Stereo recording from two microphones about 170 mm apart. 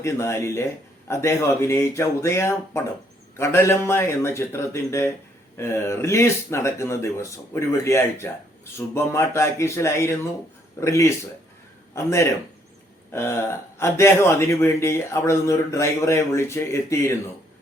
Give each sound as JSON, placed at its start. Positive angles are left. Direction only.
{"t": 0.0, "sound": "a man's voice", "side_deg": 15}